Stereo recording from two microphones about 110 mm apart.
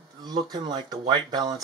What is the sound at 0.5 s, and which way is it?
Speech, 40° right (ahead or behind).